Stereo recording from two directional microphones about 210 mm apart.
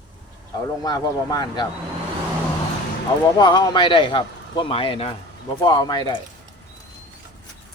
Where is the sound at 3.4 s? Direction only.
20° left (ahead or behind).